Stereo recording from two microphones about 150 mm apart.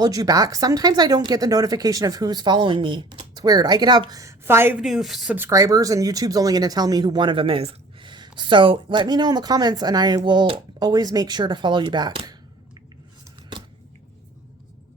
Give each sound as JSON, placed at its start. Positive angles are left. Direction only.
{"t": 0.0, "sound": "speech", "side_deg": -25}
{"t": 4.9, "sound": "a woman's voice", "side_deg": 0}
{"t": 5.4, "sound": "speech", "side_deg": -20}